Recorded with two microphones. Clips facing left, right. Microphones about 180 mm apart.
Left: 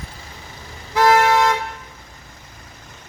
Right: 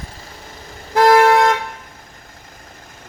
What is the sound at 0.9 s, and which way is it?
Toot, 50° right (ahead or behind).